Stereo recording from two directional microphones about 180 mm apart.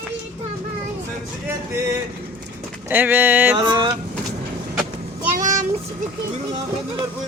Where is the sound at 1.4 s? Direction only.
10° right (ahead or behind).